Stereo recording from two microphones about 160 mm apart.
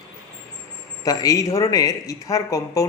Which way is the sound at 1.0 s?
20° left (ahead or behind).